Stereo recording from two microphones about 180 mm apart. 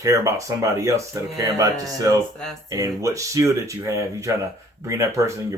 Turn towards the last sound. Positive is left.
turn(degrees=-15)  # may be behind; listen again after turning